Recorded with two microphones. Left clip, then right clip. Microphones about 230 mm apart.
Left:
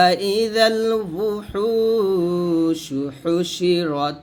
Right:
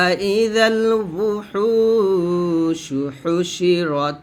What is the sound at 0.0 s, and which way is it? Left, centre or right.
Mantra, centre.